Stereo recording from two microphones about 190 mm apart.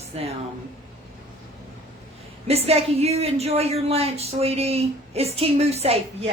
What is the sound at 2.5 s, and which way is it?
A woman's voice, 30° right (ahead or behind).